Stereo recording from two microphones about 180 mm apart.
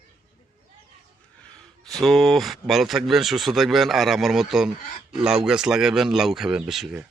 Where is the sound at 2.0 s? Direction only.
Centre (ahead or behind).